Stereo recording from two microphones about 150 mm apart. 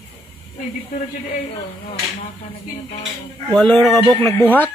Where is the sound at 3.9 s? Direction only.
25° right (ahead or behind).